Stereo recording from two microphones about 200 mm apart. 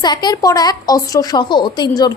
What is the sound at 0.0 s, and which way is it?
A woman's voice, 20° left (ahead or behind).